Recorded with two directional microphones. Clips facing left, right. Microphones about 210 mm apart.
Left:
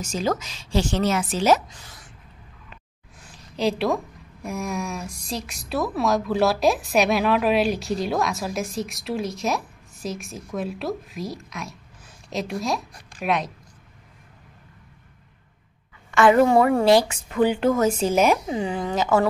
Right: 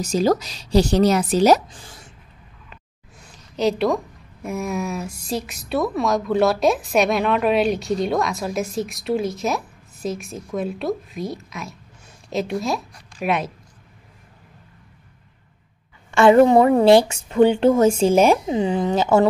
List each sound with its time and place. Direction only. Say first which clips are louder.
0.0 s a woman's voice: right 6 dB; 35° right (ahead or behind)
3.2 s a woman's voice: right 3 dB; centre (ahead or behind)
16.1 s a woman's voice: right 4 dB; 25° right (ahead or behind)